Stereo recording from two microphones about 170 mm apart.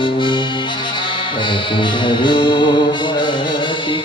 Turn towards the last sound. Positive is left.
turn(degrees=25)  # may be behind; listen again after turning